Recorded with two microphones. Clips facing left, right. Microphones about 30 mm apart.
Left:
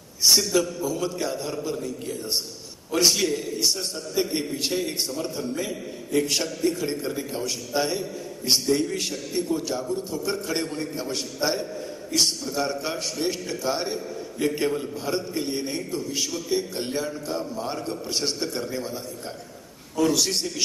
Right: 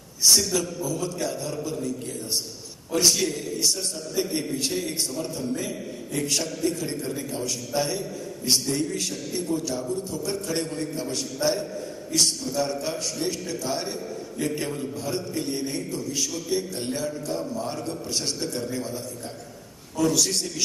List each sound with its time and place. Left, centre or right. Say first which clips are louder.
0.4 s a man's voice: left 3 dB; centre
2.9 s a man's voice: left 1 dB; centre
20.0 s a man's voice: left 1 dB; centre